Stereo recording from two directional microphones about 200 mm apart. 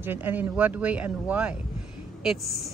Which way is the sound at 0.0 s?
10° right (ahead or behind).